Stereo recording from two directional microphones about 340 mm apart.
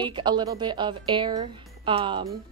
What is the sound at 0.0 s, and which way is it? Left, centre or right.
Speech, centre.